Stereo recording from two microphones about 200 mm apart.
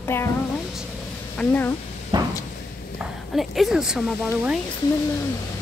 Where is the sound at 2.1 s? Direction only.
20° right (ahead or behind).